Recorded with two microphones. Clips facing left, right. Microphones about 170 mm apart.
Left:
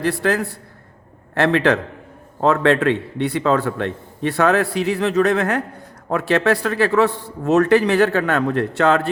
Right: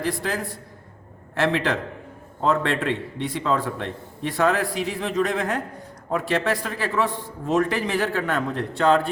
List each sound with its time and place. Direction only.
0.0 s a man's voice: 70° left (ahead or behind)